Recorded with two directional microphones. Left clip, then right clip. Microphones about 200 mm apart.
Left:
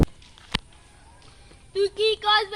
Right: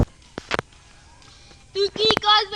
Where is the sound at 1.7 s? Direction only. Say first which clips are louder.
Right 3 dB; 10° left (ahead or behind).